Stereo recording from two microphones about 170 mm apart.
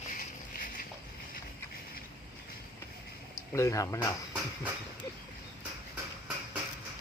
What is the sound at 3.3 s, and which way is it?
Speech, 20° left (ahead or behind).